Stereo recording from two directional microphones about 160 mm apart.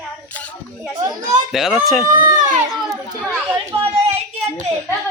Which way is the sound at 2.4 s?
50° right (ahead or behind).